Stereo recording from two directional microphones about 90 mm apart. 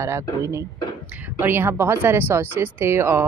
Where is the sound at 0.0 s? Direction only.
30° right (ahead or behind).